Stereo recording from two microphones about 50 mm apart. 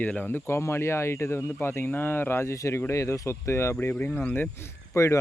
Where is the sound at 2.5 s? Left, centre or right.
Left.